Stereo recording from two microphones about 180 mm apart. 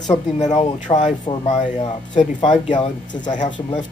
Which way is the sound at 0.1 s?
40° left (ahead or behind).